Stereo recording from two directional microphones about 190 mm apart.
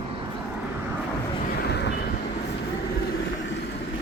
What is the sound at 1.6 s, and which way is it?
Vehicle, 60° left (ahead or behind).